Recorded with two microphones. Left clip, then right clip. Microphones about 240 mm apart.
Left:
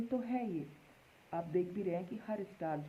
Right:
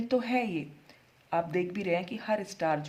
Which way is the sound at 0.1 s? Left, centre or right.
Right.